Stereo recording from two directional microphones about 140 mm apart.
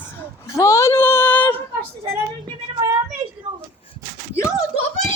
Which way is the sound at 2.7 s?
35° right (ahead or behind).